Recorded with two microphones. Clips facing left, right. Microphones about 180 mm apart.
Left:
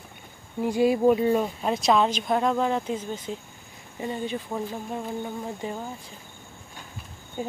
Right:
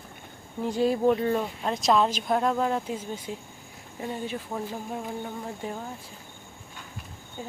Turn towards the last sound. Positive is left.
turn(degrees=15)  # may be behind; listen again after turning